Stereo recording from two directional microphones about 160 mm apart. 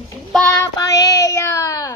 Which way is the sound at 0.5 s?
20° left (ahead or behind).